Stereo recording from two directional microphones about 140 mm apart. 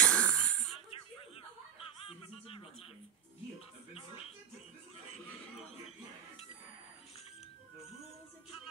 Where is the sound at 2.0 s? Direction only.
45° left (ahead or behind).